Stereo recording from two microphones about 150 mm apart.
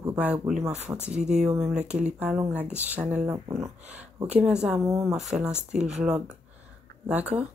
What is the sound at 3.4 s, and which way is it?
Speech, 25° right (ahead or behind).